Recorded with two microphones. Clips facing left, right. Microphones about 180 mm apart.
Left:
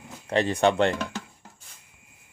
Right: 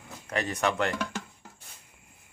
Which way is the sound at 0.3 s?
30° left (ahead or behind).